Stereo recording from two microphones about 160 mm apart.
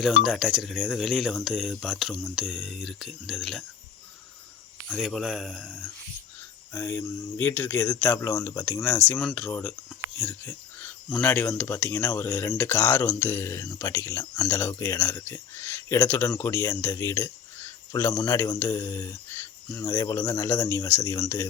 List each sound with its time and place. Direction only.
0.2 s speech: centre (ahead or behind)
4.9 s speech: centre (ahead or behind); by 9.0 s 15° left (ahead or behind)
9.0 s speech: centre (ahead or behind)
9.3 s speech: 10° left (ahead or behind)
10.2 s a sound: 15° left (ahead or behind)
11.2 s speech: 15° left (ahead or behind)